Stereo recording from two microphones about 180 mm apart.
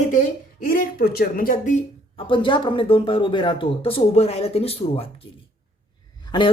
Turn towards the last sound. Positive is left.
turn(degrees=25)  # may be behind; listen again after turning